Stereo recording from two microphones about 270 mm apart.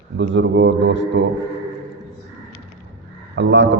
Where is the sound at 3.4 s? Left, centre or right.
Right.